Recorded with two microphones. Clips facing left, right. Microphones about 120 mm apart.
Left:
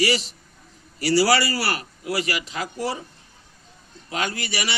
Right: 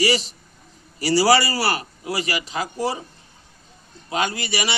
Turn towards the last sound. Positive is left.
turn(degrees=-25)  # may be behind; listen again after turning